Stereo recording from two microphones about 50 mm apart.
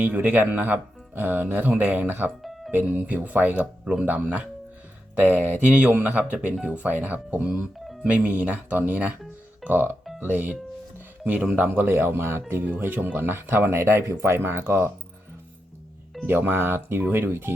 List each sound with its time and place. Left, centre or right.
0.0 s speech: right
2.4 s music: centre
2.8 s speech: right
11.7 s speech: right
12.8 s speech: right
16.2 s speech: right